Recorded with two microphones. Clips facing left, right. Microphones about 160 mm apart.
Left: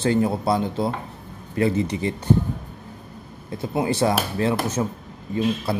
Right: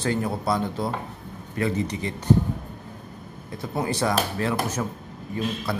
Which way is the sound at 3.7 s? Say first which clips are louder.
Left 3 dB; 25° left (ahead or behind).